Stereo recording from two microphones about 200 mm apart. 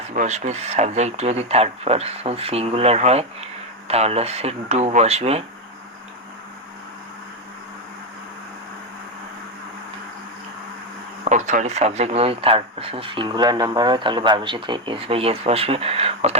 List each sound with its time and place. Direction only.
0.1 s speech: 35° right (ahead or behind)
11.3 s speech: 35° right (ahead or behind)